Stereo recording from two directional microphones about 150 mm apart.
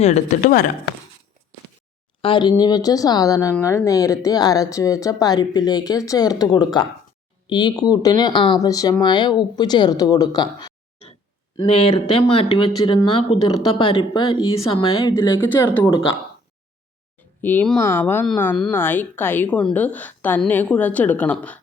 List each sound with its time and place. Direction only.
0.0 s speech: 50° left (ahead or behind)
0.5 s speech: 70° left (ahead or behind)
2.2 s speech: 30° left (ahead or behind)
15.5 s a woman's voice: 10° left (ahead or behind)
17.4 s a woman's voice: 10° left (ahead or behind)